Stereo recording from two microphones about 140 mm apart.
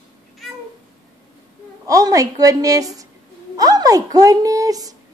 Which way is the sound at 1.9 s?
25° right (ahead or behind).